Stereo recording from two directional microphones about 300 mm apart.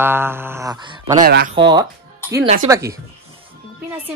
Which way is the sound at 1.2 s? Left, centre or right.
Right.